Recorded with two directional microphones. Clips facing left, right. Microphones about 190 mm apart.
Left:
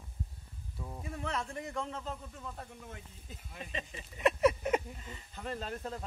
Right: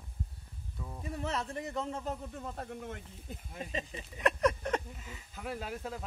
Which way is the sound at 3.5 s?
40° right (ahead or behind).